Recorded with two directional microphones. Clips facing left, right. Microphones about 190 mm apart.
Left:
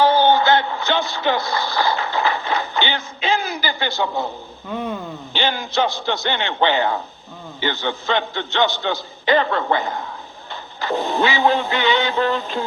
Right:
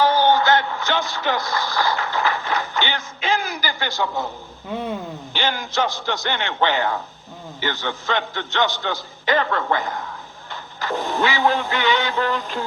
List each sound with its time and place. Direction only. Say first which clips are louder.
0.0 s music: left 2 dB; 20° left (ahead or behind)
5.3 s a man's voice: left 3 dB; 20° left (ahead or behind)